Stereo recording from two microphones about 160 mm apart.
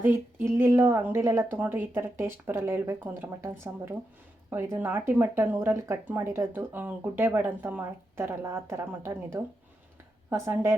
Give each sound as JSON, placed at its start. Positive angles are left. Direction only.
{"t": 0.1, "sound": "speech", "side_deg": -15}